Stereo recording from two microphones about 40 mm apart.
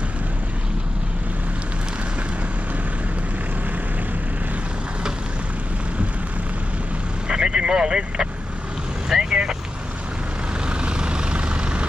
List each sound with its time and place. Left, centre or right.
7.2 s vehicle: right
10.9 s vehicle: right